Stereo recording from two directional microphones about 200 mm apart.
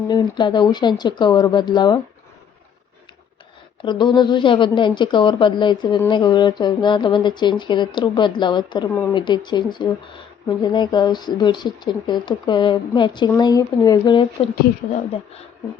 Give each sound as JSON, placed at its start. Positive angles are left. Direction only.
{"t": 0.1, "sound": "speech", "side_deg": 20}
{"t": 3.8, "sound": "speech", "side_deg": 20}